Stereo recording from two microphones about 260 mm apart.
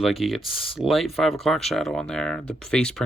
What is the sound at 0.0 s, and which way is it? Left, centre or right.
Speech, centre.